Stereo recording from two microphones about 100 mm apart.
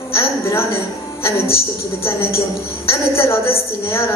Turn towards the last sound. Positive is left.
turn(degrees=25)  # may be behind; listen again after turning